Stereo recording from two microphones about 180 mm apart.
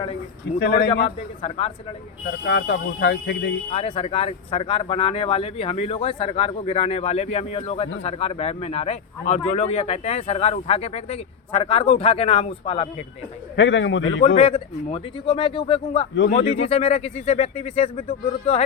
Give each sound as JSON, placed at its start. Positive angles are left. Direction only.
{"t": 0.6, "sound": "a man's voice", "side_deg": 65}
{"t": 0.9, "sound": "speech", "side_deg": 30}
{"t": 2.2, "sound": "speech", "side_deg": 70}
{"t": 3.7, "sound": "speech", "side_deg": 30}
{"t": 13.6, "sound": "a man's voice", "side_deg": 90}
{"t": 14.0, "sound": "speech", "side_deg": 35}